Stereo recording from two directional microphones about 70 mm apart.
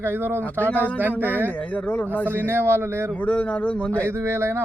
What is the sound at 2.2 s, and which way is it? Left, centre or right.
Speech, right.